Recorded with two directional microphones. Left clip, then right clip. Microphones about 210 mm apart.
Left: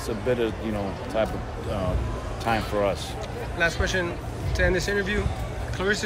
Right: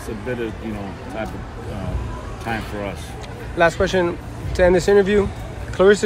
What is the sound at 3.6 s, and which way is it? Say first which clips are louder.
Speech: right 8 dB; centre (ahead or behind).